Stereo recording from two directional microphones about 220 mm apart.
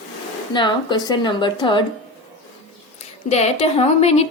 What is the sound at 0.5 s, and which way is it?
A woman's voice, 20° left (ahead or behind).